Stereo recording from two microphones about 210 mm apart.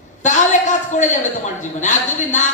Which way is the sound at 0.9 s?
35° left (ahead or behind).